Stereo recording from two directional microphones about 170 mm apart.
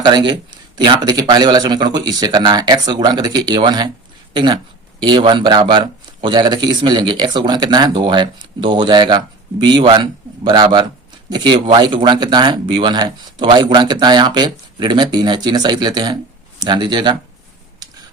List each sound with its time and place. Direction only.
0.0 s speech: 25° right (ahead or behind)
4.9 s speech: 25° right (ahead or behind)